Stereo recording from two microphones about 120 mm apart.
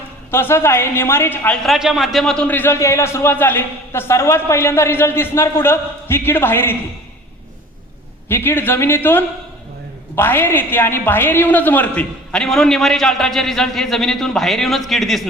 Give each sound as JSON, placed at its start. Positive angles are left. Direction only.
{"t": 0.3, "sound": "a man's voice", "side_deg": 20}
{"t": 1.6, "sound": "a man's voice", "side_deg": 0}
{"t": 8.3, "sound": "a woman's voice", "side_deg": 20}